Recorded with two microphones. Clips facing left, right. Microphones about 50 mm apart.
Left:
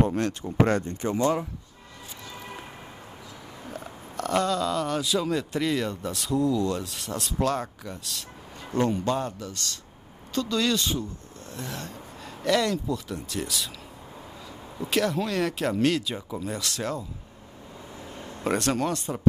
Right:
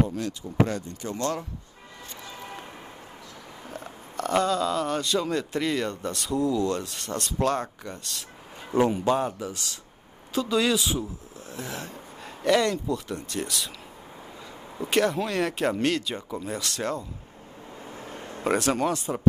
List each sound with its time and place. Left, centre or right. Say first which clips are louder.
0.0 s speech: left 2 dB; left
1.1 s speech: left 4 dB; centre
3.7 s speech: right 1 dB; centre
8.7 s speech: right 3 dB; centre
14.8 s speech: right 2 dB; centre
18.4 s speech: right 1 dB; centre